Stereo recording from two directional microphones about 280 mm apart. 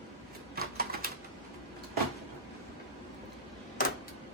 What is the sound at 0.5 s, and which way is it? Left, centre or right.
Typewriter, right.